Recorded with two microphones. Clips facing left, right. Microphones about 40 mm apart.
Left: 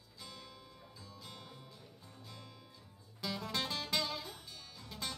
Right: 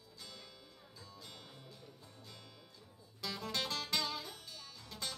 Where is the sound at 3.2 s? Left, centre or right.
Centre.